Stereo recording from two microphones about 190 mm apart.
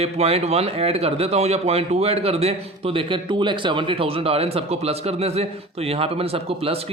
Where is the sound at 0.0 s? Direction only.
35° right (ahead or behind).